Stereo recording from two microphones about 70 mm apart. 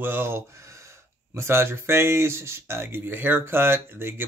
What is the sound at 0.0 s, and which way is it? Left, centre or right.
Speech, right.